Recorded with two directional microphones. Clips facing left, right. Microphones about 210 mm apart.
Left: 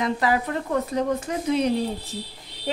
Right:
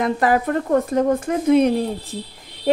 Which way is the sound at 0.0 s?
50° right (ahead or behind).